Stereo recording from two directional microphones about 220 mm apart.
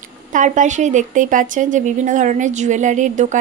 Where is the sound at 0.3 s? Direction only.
35° right (ahead or behind).